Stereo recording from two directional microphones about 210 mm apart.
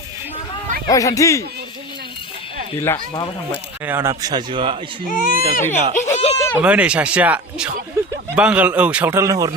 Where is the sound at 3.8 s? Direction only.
10° right (ahead or behind).